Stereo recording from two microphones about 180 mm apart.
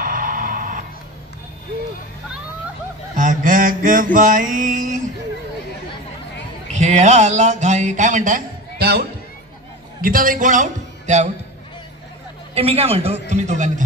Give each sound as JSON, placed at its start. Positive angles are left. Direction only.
{"t": 0.0, "sound": "music", "side_deg": -50}
{"t": 3.2, "sound": "mantra", "side_deg": -45}
{"t": 6.7, "sound": "speech", "side_deg": -40}
{"t": 10.0, "sound": "speech", "side_deg": -50}
{"t": 12.5, "sound": "a man's voice", "side_deg": -35}